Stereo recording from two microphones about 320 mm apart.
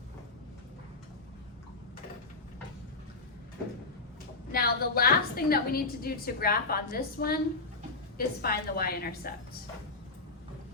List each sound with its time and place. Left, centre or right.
4.5 s a woman's voice: left